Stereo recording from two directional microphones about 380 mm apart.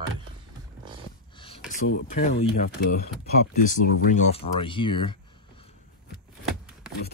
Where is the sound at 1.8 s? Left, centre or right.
Left.